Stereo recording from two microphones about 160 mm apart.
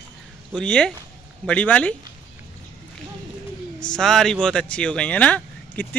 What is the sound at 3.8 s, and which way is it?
Speech, 5° left (ahead or behind).